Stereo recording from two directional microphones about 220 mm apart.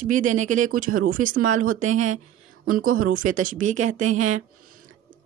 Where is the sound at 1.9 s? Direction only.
35° right (ahead or behind).